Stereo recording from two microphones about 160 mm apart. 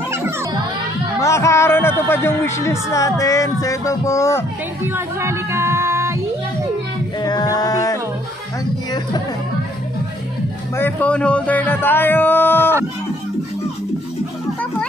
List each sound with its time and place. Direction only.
1.2 s speech: 20° left (ahead or behind)
4.9 s singing: 15° right (ahead or behind)
7.2 s a sound: 25° left (ahead or behind)
10.8 s speech: 10° left (ahead or behind)